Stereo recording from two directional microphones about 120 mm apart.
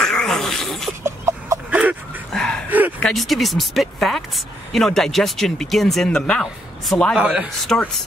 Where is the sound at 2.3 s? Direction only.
5° left (ahead or behind).